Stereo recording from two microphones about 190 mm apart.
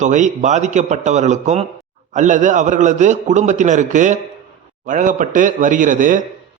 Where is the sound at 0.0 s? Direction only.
40° right (ahead or behind).